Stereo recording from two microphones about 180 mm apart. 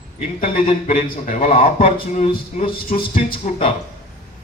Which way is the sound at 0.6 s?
35° left (ahead or behind).